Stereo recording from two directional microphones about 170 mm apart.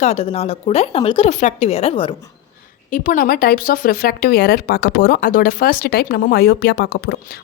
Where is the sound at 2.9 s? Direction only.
55° left (ahead or behind); by 7.1 s 80° left.